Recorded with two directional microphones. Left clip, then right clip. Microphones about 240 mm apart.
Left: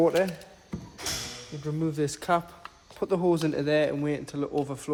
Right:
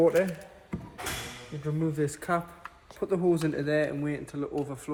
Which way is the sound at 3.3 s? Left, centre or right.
Left.